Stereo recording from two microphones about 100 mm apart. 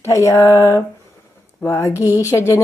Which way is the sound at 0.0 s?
30° left (ahead or behind).